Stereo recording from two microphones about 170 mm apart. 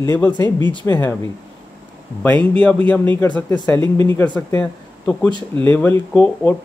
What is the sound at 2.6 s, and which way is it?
Speech, 10° left (ahead or behind).